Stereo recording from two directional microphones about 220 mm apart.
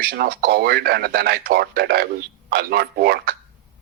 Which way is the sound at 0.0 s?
45° right (ahead or behind).